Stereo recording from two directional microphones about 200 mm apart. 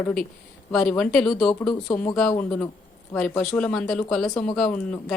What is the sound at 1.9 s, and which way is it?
Speech, 20° left (ahead or behind).